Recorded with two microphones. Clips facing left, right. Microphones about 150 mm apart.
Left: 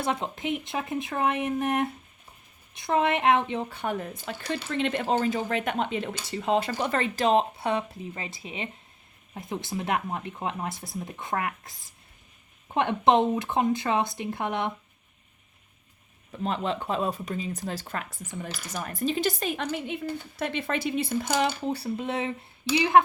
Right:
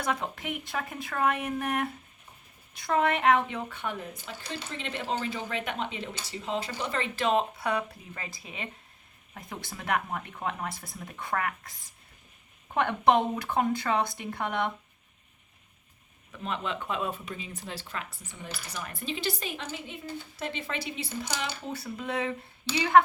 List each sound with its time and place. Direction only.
0.0 s speech: 25° left (ahead or behind)
3.7 s speech: 40° left (ahead or behind)
4.4 s speech: 60° left (ahead or behind)
4.9 s speech: 45° left (ahead or behind); by 11.7 s 20° left (ahead or behind)
12.7 s speech: 25° left (ahead or behind)
16.3 s speech: 35° left (ahead or behind)
21.7 s speech: 30° left (ahead or behind)